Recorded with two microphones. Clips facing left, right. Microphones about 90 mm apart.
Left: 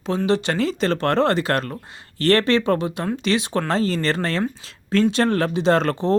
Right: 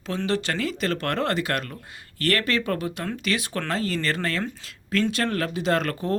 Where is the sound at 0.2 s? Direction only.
20° left (ahead or behind).